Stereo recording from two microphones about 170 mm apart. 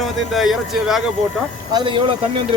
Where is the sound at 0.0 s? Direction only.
Centre (ahead or behind).